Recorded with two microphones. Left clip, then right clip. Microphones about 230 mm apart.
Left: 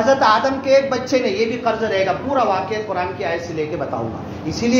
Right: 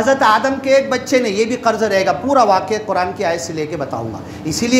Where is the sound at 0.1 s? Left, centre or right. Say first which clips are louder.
Right 2 dB; right.